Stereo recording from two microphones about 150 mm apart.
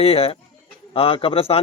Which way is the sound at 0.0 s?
40° left (ahead or behind).